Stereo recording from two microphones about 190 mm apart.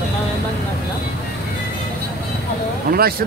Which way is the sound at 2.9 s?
55° right (ahead or behind).